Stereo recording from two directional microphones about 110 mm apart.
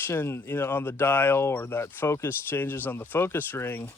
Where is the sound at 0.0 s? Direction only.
20° left (ahead or behind).